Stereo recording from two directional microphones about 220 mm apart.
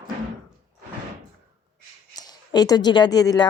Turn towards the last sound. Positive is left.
turn(degrees=15)  # may be behind; listen again after turning